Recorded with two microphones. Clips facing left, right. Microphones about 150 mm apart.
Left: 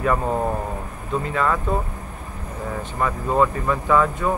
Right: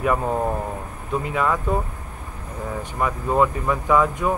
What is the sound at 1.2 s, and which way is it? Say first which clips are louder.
Speech: even; 10° right (ahead or behind).